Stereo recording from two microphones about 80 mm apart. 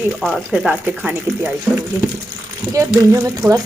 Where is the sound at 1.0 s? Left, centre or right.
Centre.